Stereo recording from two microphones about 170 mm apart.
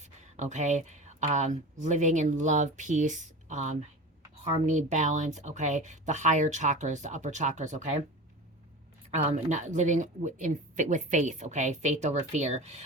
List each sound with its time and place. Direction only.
0.3 s speech: 45° right (ahead or behind)
9.0 s speech: 40° right (ahead or behind)